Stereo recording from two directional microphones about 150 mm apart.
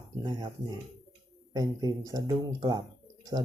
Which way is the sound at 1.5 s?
25° right (ahead or behind).